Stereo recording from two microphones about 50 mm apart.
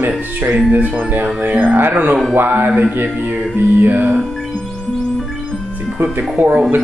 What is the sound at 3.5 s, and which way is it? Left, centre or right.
Music, right.